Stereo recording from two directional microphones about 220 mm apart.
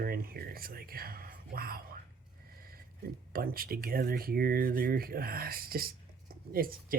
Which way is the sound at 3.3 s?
40° right (ahead or behind).